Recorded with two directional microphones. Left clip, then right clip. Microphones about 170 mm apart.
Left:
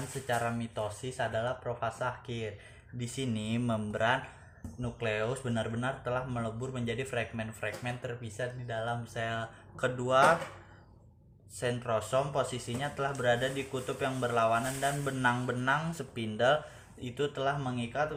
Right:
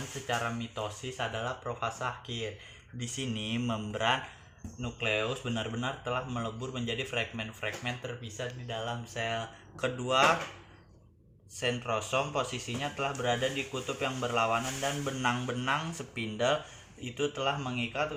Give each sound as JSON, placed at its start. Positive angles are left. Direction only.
{"t": 0.3, "sound": "speech", "side_deg": 35}
{"t": 11.6, "sound": "speech", "side_deg": 30}